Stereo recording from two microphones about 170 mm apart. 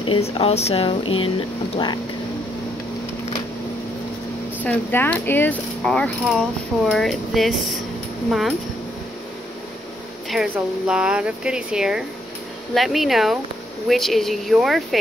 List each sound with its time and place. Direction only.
0.0 s speech: 30° left (ahead or behind)
4.6 s speech: 10° left (ahead or behind)
10.5 s speech: 5° right (ahead or behind)